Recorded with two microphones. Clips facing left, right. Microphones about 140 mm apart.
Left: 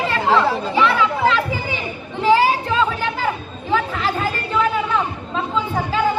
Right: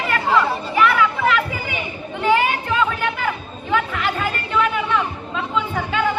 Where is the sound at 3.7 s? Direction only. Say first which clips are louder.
Left 1 dB; 35° left (ahead or behind).